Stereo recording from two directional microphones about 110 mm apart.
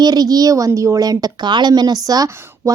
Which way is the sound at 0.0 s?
35° right (ahead or behind).